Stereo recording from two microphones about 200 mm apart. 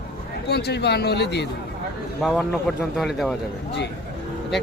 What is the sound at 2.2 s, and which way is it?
A man's voice, centre (ahead or behind).